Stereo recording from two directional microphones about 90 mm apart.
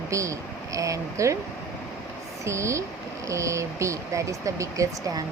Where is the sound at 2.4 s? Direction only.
35° right (ahead or behind).